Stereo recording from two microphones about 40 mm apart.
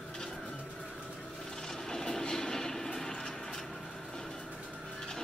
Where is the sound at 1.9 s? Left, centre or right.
Centre.